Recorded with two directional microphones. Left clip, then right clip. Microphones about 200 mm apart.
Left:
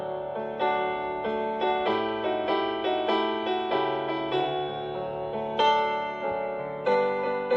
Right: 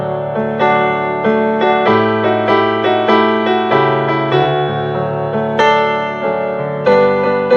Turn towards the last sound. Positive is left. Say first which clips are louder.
# right 14 dB
turn(degrees=-50)  # may be behind; listen again after turning